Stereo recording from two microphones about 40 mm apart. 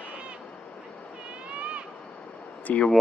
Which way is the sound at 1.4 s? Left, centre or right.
Right.